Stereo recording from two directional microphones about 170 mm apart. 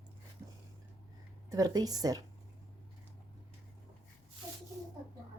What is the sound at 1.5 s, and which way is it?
Speech, 20° right (ahead or behind).